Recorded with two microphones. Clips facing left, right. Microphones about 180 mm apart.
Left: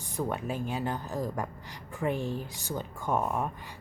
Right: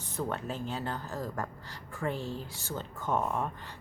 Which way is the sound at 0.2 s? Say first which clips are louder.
Left 3 dB; 10° left (ahead or behind).